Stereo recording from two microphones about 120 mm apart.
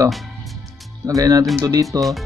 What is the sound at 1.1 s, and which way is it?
Speech, 30° right (ahead or behind).